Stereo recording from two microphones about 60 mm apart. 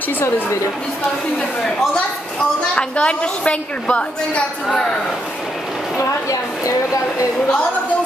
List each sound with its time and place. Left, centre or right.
2.7 s a woman's voice: centre
6.6 s speech: left